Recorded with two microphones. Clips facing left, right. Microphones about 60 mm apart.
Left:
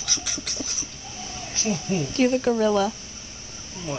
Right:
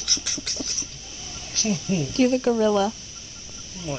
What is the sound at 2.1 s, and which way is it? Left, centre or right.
Speech, centre.